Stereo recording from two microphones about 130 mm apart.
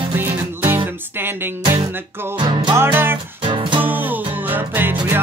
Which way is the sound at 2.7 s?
20° right (ahead or behind).